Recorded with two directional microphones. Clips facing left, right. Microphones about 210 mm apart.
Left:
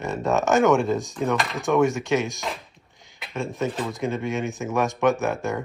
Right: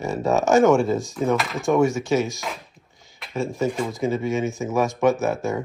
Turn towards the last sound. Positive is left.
turn(degrees=0)  # may be behind; listen again after turning